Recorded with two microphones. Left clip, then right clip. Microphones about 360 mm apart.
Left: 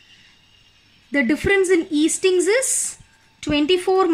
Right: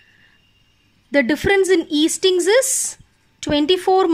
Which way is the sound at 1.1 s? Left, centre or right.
Centre.